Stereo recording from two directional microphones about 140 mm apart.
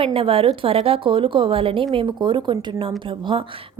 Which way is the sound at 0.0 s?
40° right (ahead or behind).